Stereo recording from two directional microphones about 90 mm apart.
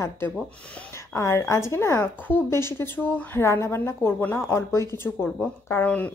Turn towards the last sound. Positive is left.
turn(degrees=20)  # may be behind; listen again after turning